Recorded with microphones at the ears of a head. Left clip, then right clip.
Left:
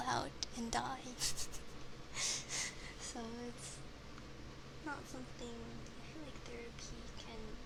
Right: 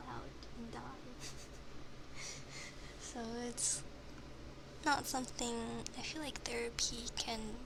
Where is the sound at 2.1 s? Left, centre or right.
Left.